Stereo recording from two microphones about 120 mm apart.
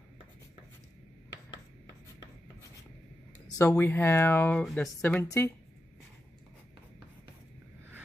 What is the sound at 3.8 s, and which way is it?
Speech, 20° left (ahead or behind).